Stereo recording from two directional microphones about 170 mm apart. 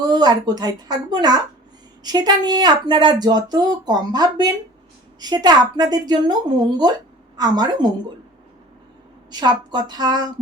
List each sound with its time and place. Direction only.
0.0 s speech: 25° right (ahead or behind)
9.3 s speech: 25° right (ahead or behind)